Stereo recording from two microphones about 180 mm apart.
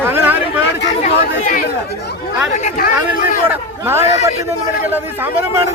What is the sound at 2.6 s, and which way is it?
Chatter, 55° left (ahead or behind).